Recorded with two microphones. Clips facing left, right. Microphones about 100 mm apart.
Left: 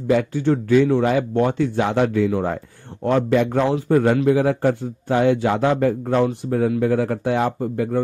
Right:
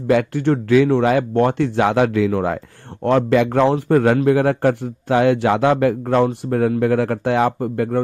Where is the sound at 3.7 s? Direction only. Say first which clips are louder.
Right 2 dB; 65° right (ahead or behind).